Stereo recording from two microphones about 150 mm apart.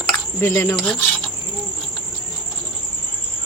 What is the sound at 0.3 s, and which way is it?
Speech, 15° left (ahead or behind).